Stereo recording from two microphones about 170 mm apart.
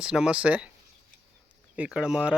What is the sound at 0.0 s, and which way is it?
Speech, 5° right (ahead or behind).